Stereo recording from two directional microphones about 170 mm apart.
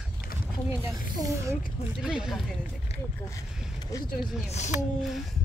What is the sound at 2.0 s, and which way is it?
Speech, 5° right (ahead or behind).